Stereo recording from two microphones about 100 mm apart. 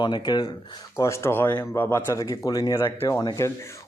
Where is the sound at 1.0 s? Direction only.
25° left (ahead or behind).